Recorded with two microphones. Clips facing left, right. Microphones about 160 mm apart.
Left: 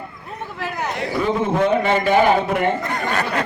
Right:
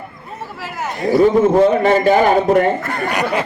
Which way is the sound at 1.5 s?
35° right (ahead or behind).